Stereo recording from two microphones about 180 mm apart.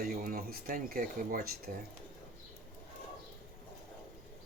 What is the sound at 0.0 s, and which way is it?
Speech, 55° right (ahead or behind).